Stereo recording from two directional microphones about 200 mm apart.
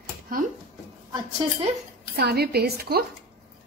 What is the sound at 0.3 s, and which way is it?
Speech, 45° right (ahead or behind).